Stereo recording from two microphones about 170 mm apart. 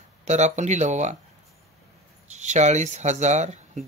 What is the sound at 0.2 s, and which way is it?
Speech, 40° right (ahead or behind).